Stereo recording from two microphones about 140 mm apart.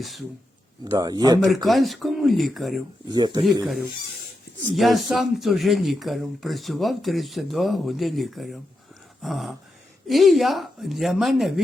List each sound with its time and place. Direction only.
0.0 s speech: centre (ahead or behind)
0.9 s speech: 30° right (ahead or behind)
1.6 s speech: centre (ahead or behind)
3.1 s speech: 30° right (ahead or behind)
4.7 s speech: centre (ahead or behind)